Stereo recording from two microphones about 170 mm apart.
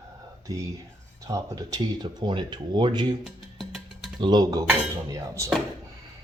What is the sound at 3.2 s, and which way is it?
Music, centre (ahead or behind).